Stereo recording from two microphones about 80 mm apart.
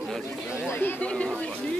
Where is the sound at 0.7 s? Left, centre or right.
Left.